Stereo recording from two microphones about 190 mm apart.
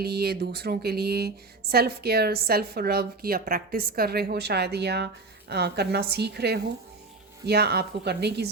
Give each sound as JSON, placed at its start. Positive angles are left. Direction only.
{"t": 0.0, "sound": "a woman's voice", "side_deg": -55}